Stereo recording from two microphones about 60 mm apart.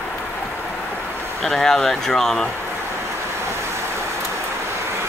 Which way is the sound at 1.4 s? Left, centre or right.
Centre.